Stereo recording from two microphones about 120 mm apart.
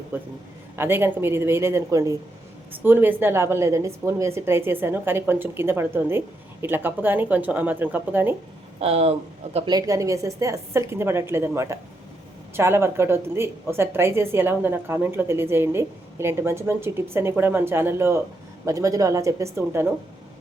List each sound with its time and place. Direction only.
0.1 s a woman's voice: 20° right (ahead or behind)
8.8 s speech: 60° right (ahead or behind)
9.6 s a woman's voice: 30° right (ahead or behind)